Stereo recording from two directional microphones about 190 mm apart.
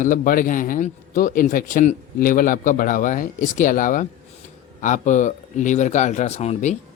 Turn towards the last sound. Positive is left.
turn(degrees=35)  # may be behind; listen again after turning